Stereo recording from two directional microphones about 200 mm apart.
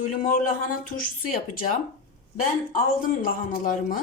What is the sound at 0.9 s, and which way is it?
Speech, 45° left (ahead or behind).